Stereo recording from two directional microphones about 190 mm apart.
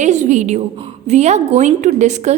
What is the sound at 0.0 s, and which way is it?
A woman's voice, 40° right (ahead or behind).